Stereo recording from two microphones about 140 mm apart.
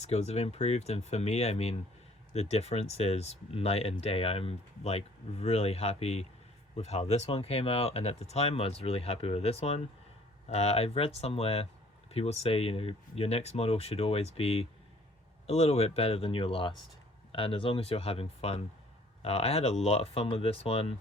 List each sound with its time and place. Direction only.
0.0 s speech: 50° left (ahead or behind)